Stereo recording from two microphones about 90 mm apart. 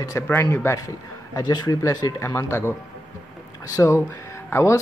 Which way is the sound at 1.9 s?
40° left (ahead or behind).